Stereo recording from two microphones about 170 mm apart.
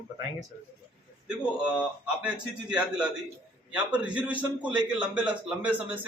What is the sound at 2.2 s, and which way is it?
A man's voice, 5° right (ahead or behind).